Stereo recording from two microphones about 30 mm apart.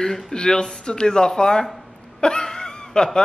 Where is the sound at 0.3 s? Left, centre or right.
Left.